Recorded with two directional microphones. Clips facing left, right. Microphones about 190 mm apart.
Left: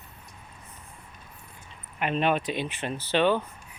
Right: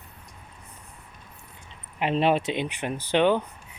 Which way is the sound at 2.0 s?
30° right (ahead or behind).